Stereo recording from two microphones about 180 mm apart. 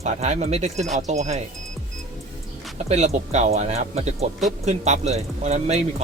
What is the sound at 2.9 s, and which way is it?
Speech, 40° right (ahead or behind).